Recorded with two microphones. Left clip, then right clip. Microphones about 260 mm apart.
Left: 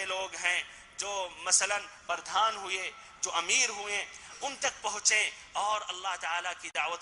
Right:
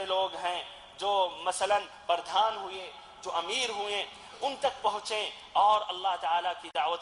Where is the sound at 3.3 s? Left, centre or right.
Left.